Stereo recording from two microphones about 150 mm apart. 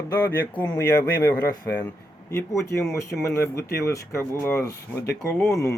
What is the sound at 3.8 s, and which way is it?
Speech, 15° left (ahead or behind).